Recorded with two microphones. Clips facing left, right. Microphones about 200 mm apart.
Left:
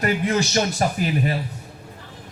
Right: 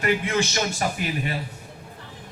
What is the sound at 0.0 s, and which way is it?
A man's voice, 40° left (ahead or behind).